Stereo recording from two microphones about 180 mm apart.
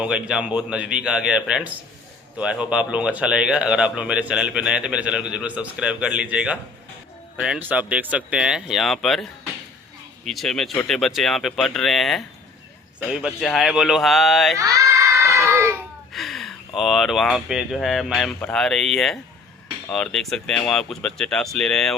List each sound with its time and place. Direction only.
0.0 s speech: 5° right (ahead or behind)
10.2 s speech: centre (ahead or behind)
14.6 s a sound: 15° right (ahead or behind)
16.1 s speech: centre (ahead or behind)